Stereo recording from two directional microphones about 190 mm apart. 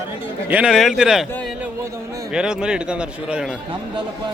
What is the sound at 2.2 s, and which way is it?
A man's voice, 5° right (ahead or behind).